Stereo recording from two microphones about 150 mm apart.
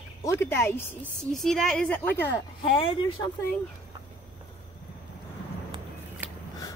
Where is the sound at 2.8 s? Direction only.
35° left (ahead or behind).